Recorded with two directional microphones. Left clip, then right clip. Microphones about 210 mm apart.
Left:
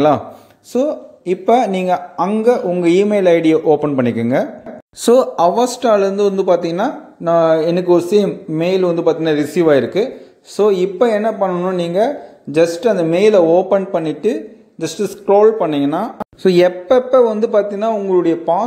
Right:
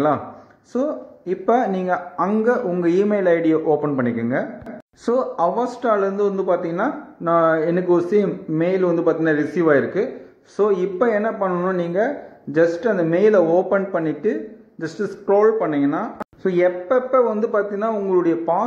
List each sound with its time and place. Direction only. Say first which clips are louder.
0.7 s a man's voice: left 6 dB; 25° left (ahead or behind)